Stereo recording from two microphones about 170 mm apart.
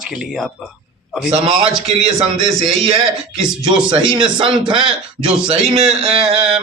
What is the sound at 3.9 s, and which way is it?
Speech, 25° right (ahead or behind).